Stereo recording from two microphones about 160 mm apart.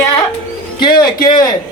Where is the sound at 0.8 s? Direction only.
30° left (ahead or behind).